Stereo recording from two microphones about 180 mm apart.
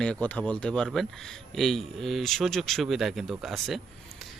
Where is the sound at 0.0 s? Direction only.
5° left (ahead or behind).